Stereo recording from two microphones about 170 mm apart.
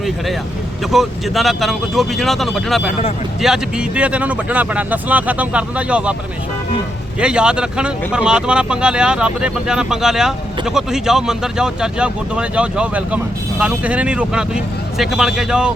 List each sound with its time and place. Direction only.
0.9 s speech: centre (ahead or behind)
7.2 s speech: 5° right (ahead or behind)